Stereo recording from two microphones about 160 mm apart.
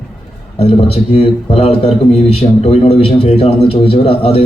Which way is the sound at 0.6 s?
40° left (ahead or behind).